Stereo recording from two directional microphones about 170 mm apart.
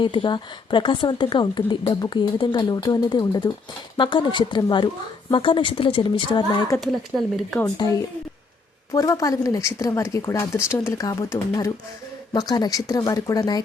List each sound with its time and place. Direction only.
0.0 s speech: 30° left (ahead or behind)
6.7 s speech: centre (ahead or behind)
7.6 s speech: 20° left (ahead or behind)